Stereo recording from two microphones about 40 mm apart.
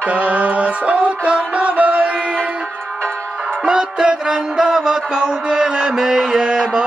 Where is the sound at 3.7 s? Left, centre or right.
Centre.